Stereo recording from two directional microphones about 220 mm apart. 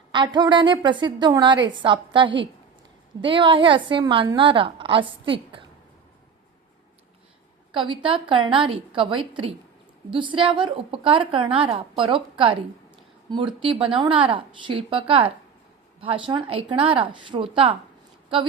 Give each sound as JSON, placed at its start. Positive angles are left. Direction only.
{"t": 0.1, "sound": "a woman's voice", "side_deg": -20}
{"t": 7.7, "sound": "a woman's voice", "side_deg": -25}